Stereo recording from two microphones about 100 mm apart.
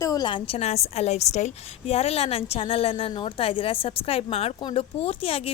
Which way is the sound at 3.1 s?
55° left (ahead or behind).